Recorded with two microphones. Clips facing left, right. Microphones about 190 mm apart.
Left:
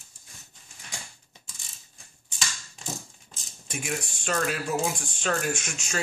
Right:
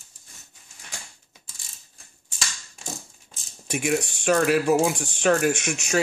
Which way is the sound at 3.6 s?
70° right (ahead or behind).